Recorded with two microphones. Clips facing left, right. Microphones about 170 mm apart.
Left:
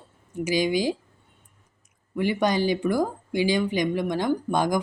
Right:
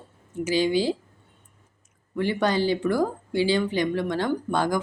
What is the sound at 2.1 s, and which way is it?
Speech, 15° left (ahead or behind).